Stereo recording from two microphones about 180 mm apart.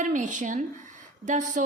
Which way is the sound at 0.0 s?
45° right (ahead or behind).